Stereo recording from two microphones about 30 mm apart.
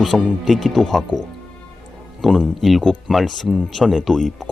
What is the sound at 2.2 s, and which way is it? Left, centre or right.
Speech, centre.